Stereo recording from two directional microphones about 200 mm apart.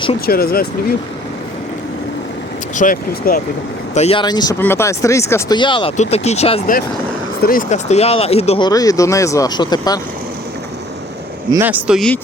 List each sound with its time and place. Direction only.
0.3 s speech: 50° left (ahead or behind)
2.7 s speech: 45° left (ahead or behind)
3.9 s speech: 30° left (ahead or behind)
11.5 s speech: 10° right (ahead or behind)